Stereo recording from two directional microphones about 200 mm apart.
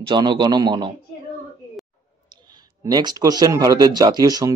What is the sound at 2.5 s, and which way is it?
Speech, 20° right (ahead or behind).